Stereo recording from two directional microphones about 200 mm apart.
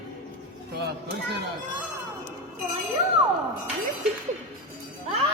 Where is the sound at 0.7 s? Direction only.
55° right (ahead or behind).